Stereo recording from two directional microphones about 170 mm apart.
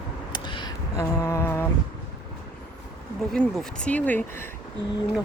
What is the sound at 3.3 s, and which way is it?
Speech, 5° left (ahead or behind).